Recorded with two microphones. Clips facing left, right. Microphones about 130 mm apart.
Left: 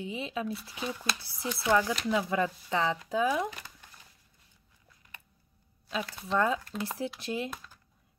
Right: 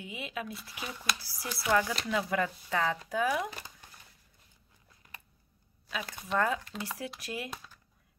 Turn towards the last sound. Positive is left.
turn(degrees=25)  # may be behind; listen again after turning